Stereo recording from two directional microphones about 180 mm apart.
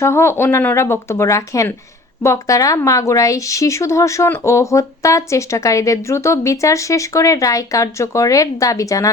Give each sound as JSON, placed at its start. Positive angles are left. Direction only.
{"t": 0.0, "sound": "a woman's voice", "side_deg": 15}